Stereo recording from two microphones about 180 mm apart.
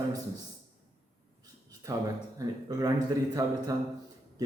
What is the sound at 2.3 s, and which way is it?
A man's voice, 20° right (ahead or behind).